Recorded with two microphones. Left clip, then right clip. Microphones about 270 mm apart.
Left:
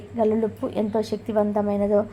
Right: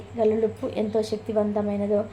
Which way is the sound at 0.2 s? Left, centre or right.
Centre.